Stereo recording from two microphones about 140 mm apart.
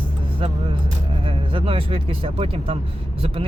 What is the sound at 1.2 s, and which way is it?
Speech, 40° right (ahead or behind).